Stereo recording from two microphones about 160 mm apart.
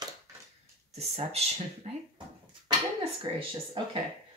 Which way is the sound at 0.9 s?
40° right (ahead or behind).